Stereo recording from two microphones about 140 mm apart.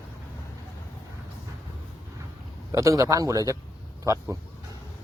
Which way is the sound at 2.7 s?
25° right (ahead or behind).